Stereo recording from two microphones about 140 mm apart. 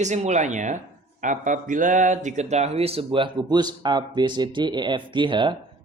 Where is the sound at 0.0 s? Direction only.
55° right (ahead or behind).